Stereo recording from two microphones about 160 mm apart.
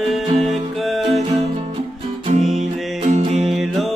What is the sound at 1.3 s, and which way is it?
Music, 45° right (ahead or behind).